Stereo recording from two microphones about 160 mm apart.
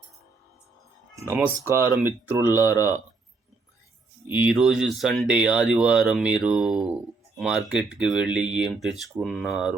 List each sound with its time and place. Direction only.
1.1 s speech: 15° right (ahead or behind)
4.3 s speech: 10° right (ahead or behind)